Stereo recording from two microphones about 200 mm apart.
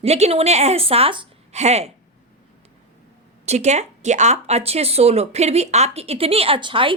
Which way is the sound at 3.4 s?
35° right (ahead or behind).